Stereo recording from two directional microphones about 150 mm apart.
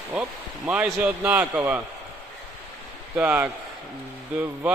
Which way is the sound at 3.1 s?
10° right (ahead or behind).